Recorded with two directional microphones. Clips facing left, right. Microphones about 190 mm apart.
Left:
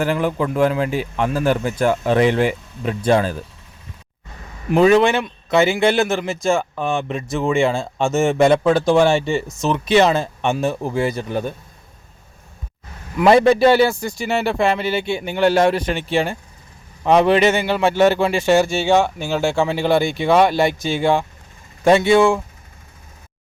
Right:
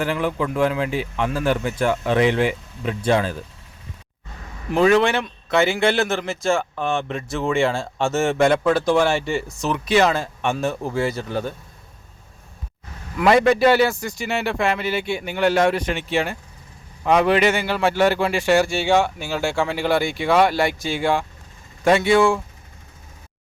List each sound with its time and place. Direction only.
0.0 s speech: 45° left (ahead or behind)
4.7 s speech: 20° left (ahead or behind)
13.2 s a man's voice: 30° left (ahead or behind)